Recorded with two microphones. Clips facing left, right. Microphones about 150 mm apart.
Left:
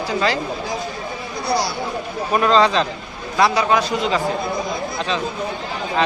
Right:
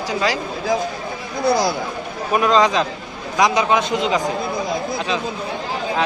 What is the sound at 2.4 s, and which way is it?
A man's voice, 10° right (ahead or behind).